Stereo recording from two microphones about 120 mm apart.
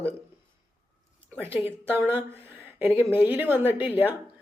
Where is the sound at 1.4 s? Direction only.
20° right (ahead or behind).